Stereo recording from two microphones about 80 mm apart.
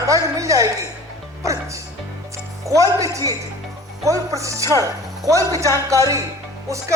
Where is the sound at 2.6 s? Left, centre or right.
Right.